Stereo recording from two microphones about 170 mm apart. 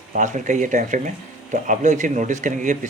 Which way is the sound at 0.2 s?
45° right (ahead or behind).